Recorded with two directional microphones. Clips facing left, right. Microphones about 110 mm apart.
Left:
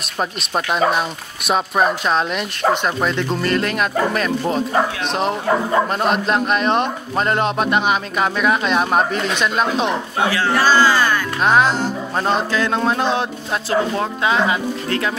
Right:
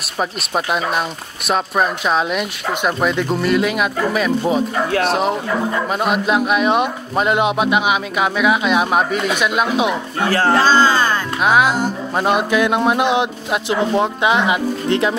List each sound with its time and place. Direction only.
1.5 s a man's voice: centre (ahead or behind)
10.2 s speech: 45° right (ahead or behind)
10.5 s speech: 20° right (ahead or behind)
11.4 s a man's voice: 5° right (ahead or behind)